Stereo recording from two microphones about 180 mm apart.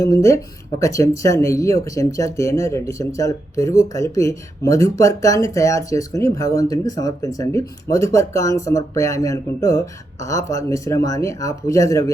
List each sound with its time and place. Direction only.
0.0 s speech: 15° left (ahead or behind)